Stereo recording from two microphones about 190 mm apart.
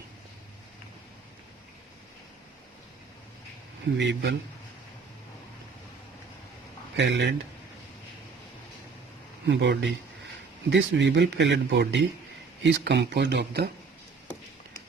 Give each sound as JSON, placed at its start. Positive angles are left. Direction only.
{"t": 3.9, "sound": "speech", "side_deg": -65}
{"t": 6.9, "sound": "speech", "side_deg": -65}
{"t": 9.5, "sound": "speech", "side_deg": -70}